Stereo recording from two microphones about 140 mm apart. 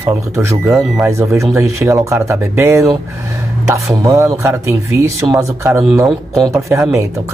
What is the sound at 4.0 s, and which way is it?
Speech, 25° right (ahead or behind).